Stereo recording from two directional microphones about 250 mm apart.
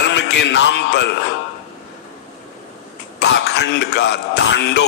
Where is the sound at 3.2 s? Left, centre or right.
Left.